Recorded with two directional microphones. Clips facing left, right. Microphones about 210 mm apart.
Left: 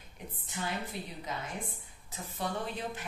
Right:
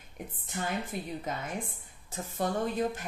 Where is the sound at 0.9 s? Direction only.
50° right (ahead or behind).